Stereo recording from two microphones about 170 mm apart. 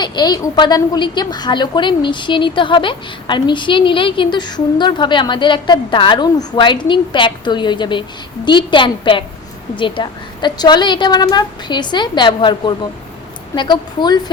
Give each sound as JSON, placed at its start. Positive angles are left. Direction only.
{"t": 0.0, "sound": "a woman's voice", "side_deg": 25}